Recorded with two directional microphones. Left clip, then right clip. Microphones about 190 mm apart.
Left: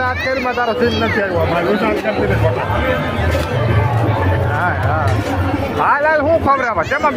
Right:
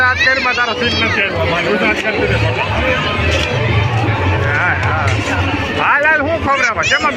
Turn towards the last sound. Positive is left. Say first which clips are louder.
# even
turn(degrees=55)  # may be behind; listen again after turning